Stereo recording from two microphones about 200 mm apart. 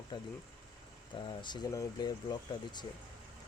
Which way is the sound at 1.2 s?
20° left (ahead or behind).